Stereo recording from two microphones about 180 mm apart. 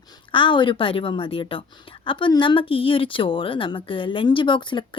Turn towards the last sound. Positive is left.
turn(degrees=25)  # may be behind; listen again after turning